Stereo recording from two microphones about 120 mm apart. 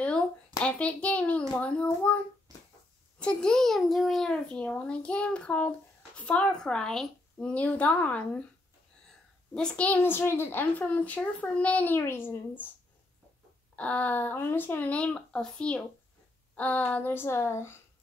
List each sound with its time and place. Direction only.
0.0 s a sound: 10° left (ahead or behind)
1.5 s a child's voice: 10° left (ahead or behind)
3.2 s a child's voice: 10° left (ahead or behind)
9.5 s a child's voice: 5° left (ahead or behind)
13.7 s a child's voice: 10° left (ahead or behind)